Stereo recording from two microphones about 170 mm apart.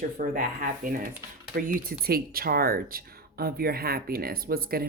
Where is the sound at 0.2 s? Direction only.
55° right (ahead or behind).